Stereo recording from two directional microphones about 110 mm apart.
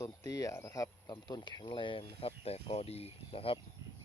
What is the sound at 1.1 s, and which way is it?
Speech, 45° left (ahead or behind).